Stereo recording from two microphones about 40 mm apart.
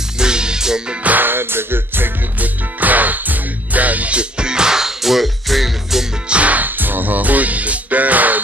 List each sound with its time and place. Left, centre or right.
0.2 s music: right
1.0 s music: right
1.3 s music: right
2.4 s music: right; by 6.0 s centre
6.2 s music: right
6.5 s music: right